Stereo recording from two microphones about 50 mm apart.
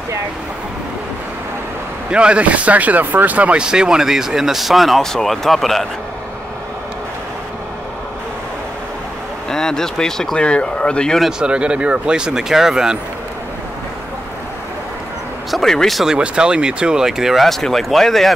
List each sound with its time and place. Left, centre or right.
2.0 s speech: right
3.6 s speech: centre
9.5 s speech: centre
10.3 s speech: left
11.1 s speech: centre
11.4 s speech: right
15.5 s speech: centre
16.2 s speech: right
17.5 s speech: centre